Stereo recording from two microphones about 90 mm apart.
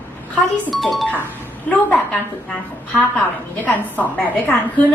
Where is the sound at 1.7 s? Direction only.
15° left (ahead or behind).